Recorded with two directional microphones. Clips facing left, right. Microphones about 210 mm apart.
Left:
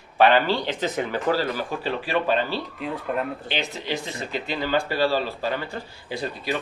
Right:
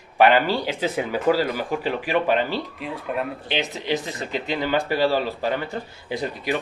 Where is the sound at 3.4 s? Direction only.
20° right (ahead or behind).